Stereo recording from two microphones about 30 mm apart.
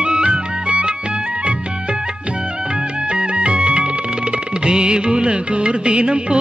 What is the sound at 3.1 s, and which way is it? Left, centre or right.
Music, right.